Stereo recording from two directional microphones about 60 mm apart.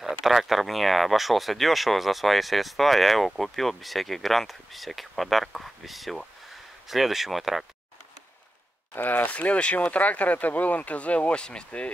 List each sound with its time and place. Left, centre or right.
0.0 s speech: centre
8.9 s speech: left